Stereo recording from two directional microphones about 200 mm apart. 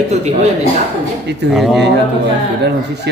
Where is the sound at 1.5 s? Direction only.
Centre (ahead or behind).